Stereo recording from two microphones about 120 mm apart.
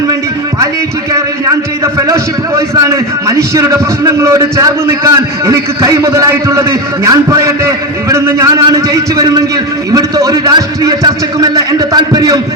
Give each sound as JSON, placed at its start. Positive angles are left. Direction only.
{"t": 1.8, "sound": "a man's voice", "side_deg": -25}